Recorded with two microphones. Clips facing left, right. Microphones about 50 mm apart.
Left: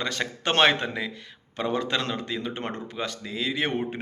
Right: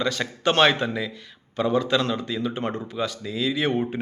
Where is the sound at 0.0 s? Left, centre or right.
Left.